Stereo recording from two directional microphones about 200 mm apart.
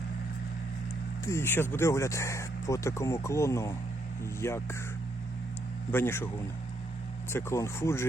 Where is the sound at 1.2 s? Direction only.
10° left (ahead or behind).